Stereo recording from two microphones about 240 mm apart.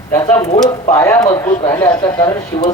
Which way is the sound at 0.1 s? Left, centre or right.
Centre.